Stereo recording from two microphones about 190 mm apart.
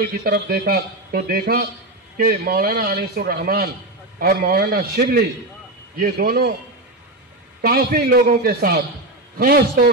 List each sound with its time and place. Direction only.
0.0 s a man's voice: 50° right (ahead or behind)
7.6 s a man's voice: 50° right (ahead or behind)